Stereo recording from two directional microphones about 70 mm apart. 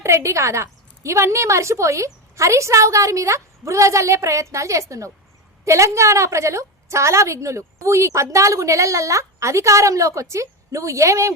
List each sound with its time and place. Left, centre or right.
0.0 s a woman's voice: right